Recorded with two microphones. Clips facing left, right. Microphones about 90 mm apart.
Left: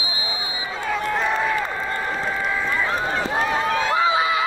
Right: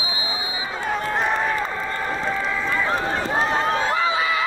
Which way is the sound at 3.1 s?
35° right (ahead or behind).